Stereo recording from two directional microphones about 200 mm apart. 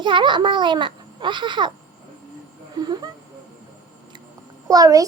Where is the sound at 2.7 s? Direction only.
20° right (ahead or behind).